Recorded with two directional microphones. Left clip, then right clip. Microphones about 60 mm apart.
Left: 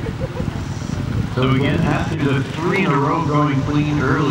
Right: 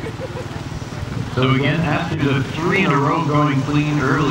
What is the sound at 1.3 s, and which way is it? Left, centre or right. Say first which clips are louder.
Speech: right 1 dB; right.